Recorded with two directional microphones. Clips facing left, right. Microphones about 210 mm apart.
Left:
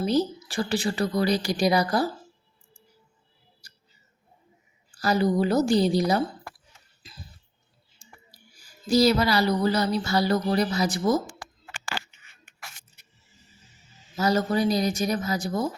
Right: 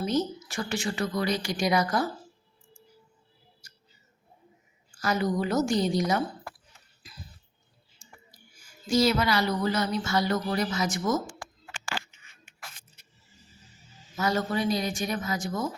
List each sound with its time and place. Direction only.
0.0 s a woman's voice: 35° left (ahead or behind)
4.9 s a woman's voice: 35° left (ahead or behind)
8.3 s speech: 35° left (ahead or behind)
14.2 s a woman's voice: 35° left (ahead or behind)